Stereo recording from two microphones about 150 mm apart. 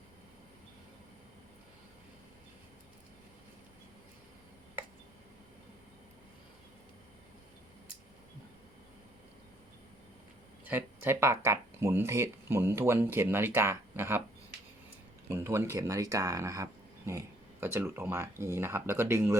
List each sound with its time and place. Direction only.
10.7 s speech: 15° right (ahead or behind)
15.3 s speech: 20° right (ahead or behind)